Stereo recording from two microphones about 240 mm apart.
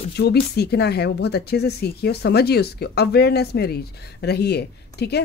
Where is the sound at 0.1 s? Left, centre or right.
Left.